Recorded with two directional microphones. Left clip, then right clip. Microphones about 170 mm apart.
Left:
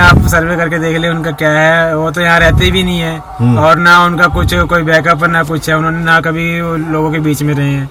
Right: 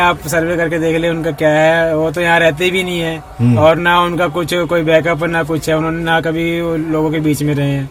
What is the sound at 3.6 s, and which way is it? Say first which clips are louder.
Speech: left 5 dB; 30° right (ahead or behind).